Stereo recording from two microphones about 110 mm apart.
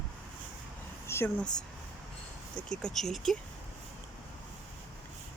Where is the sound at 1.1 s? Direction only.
25° left (ahead or behind).